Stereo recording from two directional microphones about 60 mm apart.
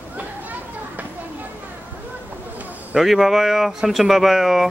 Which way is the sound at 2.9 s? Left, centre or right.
Centre.